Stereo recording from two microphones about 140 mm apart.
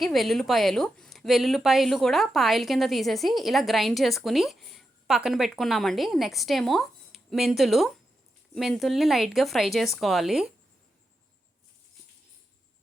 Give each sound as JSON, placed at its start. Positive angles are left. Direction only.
{"t": 0.0, "sound": "a woman's voice", "side_deg": 0}